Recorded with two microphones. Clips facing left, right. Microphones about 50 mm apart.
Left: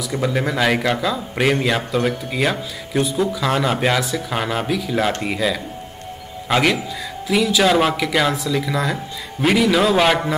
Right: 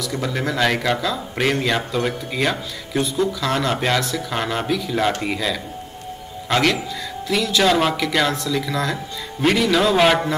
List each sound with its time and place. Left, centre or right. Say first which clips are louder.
0.1 s speech: left 5 dB; centre